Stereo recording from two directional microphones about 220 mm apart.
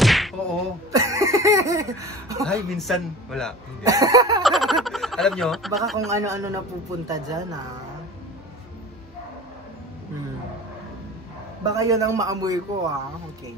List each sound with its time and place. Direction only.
0.0 s whack: centre (ahead or behind)
0.9 s a sound: 15° right (ahead or behind)
2.4 s a man's voice: centre (ahead or behind)
3.8 s a man's voice: 15° right (ahead or behind)
4.4 s speech: centre (ahead or behind)
6.0 s a man's voice: 15° right (ahead or behind)
11.6 s a man's voice: 15° right (ahead or behind)